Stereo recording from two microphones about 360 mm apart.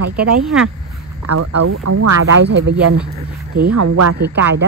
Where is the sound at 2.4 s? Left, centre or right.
Right.